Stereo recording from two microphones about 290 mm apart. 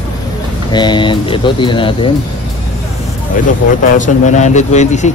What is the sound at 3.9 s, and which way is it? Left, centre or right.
A man's voice, left.